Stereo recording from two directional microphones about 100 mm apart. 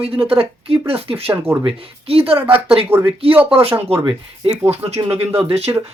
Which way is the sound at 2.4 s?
20° right (ahead or behind).